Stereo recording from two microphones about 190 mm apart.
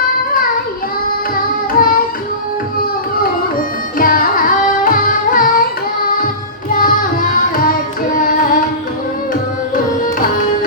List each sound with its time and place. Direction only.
1.8 s music: 50° left (ahead or behind)
3.9 s carnatic music: 50° left (ahead or behind)
6.1 s music: 45° left (ahead or behind)
8.1 s carnatic music: 45° left (ahead or behind)
9.7 s music: 45° left (ahead or behind)